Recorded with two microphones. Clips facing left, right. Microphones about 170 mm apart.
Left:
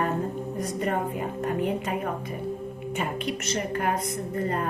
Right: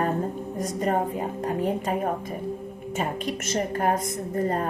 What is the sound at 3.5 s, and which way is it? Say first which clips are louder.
Speech: right 4 dB; 45° right (ahead or behind).